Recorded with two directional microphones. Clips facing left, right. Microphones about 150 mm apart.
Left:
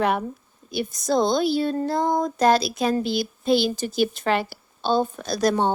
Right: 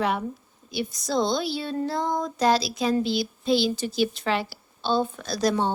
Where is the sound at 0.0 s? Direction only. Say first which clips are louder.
Left 3 dB; 55° left (ahead or behind).